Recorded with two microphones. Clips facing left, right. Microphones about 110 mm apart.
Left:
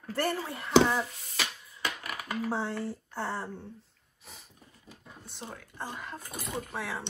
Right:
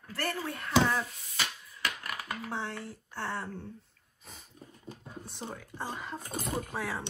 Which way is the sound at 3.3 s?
5° left (ahead or behind).